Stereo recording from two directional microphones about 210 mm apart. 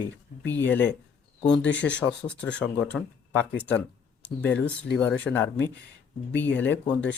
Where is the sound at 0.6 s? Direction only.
10° left (ahead or behind).